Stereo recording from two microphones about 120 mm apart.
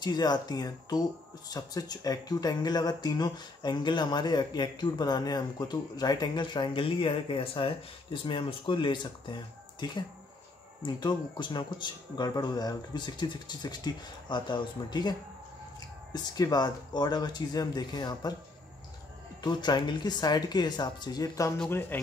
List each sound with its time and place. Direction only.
0.0 s speech: 35° left (ahead or behind)
19.4 s speech: 35° left (ahead or behind)
21.6 s speech: 15° left (ahead or behind)